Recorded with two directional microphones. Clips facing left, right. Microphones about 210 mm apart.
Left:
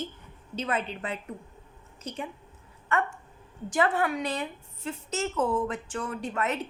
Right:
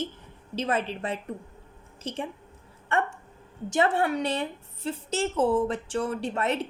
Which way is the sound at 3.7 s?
25° right (ahead or behind).